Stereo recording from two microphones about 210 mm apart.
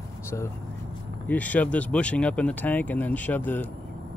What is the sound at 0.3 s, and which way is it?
Speech, 10° left (ahead or behind).